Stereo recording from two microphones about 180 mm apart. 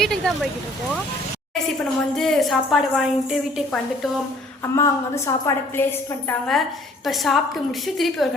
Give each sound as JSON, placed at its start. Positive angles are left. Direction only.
{"t": 0.0, "sound": "a woman's voice", "side_deg": 0}
{"t": 1.8, "sound": "a woman's voice", "side_deg": 0}
{"t": 4.6, "sound": "a woman's voice", "side_deg": 15}
{"t": 6.5, "sound": "a woman's voice", "side_deg": 0}